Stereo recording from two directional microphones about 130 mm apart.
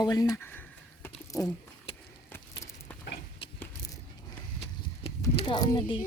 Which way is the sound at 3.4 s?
45° left (ahead or behind).